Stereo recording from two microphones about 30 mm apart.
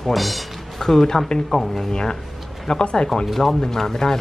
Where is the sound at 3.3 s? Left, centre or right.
Centre.